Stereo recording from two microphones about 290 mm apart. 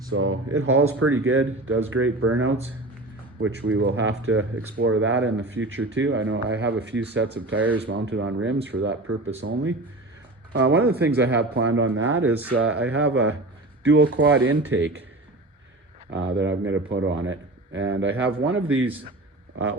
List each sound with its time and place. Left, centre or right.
0.1 s speech: right
16.0 s speech: right